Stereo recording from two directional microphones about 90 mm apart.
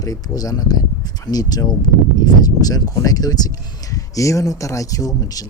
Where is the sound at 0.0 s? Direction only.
45° left (ahead or behind).